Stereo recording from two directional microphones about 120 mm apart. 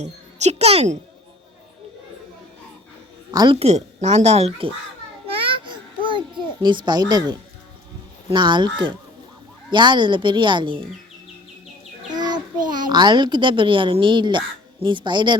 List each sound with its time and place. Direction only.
0.0 s a child's voice: 70° right (ahead or behind)
3.3 s a woman's voice: 40° right (ahead or behind)
3.6 s speech: 70° right (ahead or behind)
5.2 s babbling: 45° right (ahead or behind)
8.3 s a woman's voice: 40° right (ahead or behind)
12.1 s a child's voice: 35° right (ahead or behind)